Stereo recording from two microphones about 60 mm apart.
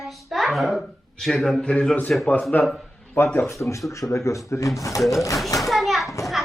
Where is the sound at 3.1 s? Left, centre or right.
Left.